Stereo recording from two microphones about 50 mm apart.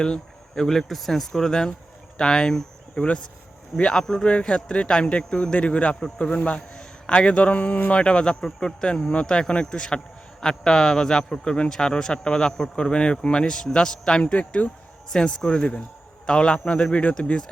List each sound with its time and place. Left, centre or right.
0.0 s a man's voice: centre